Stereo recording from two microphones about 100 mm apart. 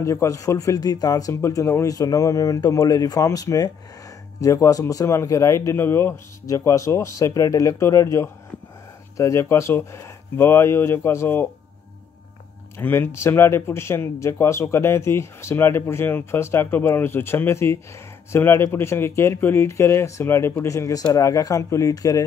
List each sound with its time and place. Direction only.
0.0 s speech: 30° left (ahead or behind)
12.8 s speech: 20° left (ahead or behind)